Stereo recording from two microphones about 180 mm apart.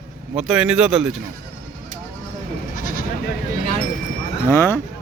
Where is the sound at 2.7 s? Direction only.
50° left (ahead or behind).